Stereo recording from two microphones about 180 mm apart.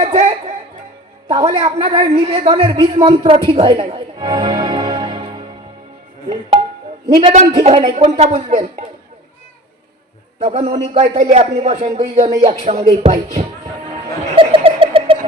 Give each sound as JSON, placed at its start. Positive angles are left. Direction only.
{"t": 0.0, "sound": "music", "side_deg": -35}
{"t": 1.3, "sound": "a man's voice", "side_deg": -35}
{"t": 7.1, "sound": "a man's voice", "side_deg": -35}
{"t": 10.4, "sound": "a man's voice", "side_deg": -35}
{"t": 14.3, "sound": "laughter", "side_deg": -30}